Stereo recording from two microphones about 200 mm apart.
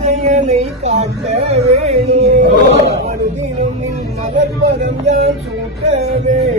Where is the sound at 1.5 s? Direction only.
35° right (ahead or behind).